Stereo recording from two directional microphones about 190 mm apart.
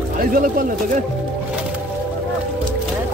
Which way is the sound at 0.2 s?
45° right (ahead or behind).